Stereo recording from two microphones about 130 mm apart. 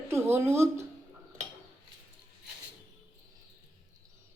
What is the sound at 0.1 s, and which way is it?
Speech, 20° right (ahead or behind).